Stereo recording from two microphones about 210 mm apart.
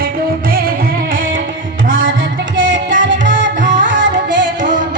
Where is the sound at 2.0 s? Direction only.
60° right (ahead or behind).